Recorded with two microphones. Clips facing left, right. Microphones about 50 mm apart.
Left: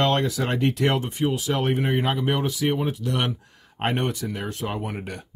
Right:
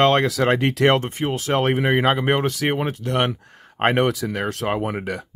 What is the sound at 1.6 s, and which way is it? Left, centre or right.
Speech, right.